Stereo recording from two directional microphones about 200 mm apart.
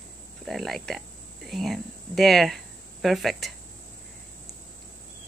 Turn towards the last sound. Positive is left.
turn(degrees=0)  # may be behind; listen again after turning